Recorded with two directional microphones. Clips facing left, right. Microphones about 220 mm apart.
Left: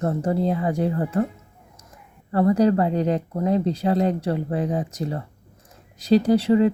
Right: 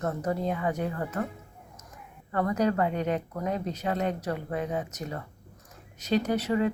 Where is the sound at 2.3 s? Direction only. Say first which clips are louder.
Left 8 dB; 30° left (ahead or behind).